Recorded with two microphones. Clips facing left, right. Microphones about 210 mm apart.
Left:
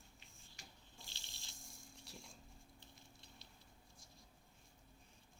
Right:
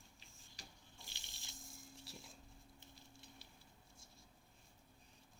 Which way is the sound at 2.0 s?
Centre (ahead or behind).